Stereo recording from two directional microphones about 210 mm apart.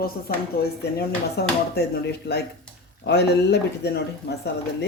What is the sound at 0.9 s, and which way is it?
Speech, 50° left (ahead or behind).